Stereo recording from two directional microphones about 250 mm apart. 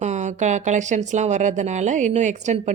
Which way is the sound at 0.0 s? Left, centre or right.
Right.